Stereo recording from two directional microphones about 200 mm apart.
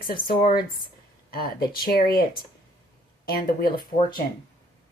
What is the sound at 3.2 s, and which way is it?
Speech, 50° left (ahead or behind).